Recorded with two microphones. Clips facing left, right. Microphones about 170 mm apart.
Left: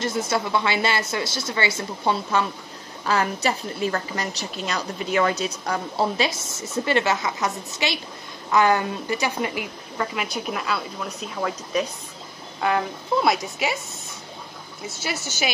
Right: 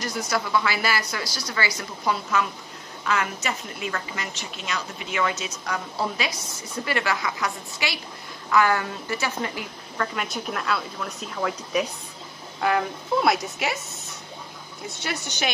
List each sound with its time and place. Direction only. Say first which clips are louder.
0.0 s a woman's voice: left 3 dB; 25° left (ahead or behind)
10.1 s speech: left 2 dB; centre (ahead or behind)
14.9 s speech: left 1 dB; 5° left (ahead or behind)